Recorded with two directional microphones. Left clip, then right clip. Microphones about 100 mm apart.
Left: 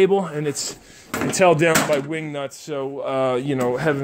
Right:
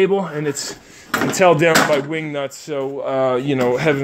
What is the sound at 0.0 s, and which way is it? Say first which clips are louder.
Speech: right 1 dB; 40° left (ahead or behind).